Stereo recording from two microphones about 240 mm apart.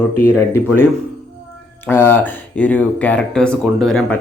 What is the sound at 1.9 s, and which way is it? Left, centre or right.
Speech, centre.